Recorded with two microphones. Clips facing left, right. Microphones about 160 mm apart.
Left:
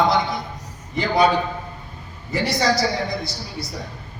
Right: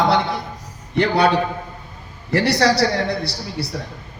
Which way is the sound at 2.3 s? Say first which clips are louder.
Right 4 dB; 70° right (ahead or behind).